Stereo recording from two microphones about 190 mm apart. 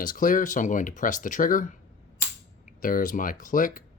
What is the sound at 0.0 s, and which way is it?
Speech, 45° left (ahead or behind).